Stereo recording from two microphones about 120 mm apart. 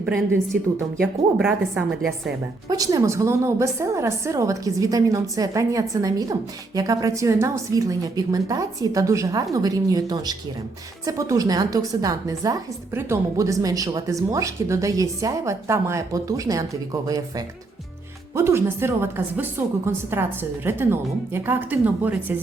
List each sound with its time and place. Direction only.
0.5 s a woman's voice: 5° right (ahead or behind)
2.6 s a woman's voice: 30° right (ahead or behind)
12.9 s speech: 20° right (ahead or behind)